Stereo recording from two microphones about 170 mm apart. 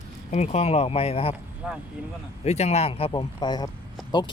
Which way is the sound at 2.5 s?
40° left (ahead or behind).